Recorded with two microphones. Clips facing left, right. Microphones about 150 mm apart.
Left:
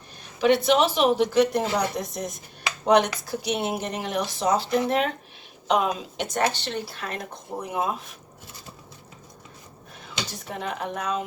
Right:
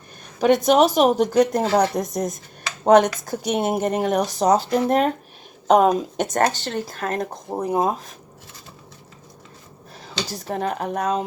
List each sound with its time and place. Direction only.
0.3 s speech: 45° right (ahead or behind)
10.0 s speech: 35° right (ahead or behind)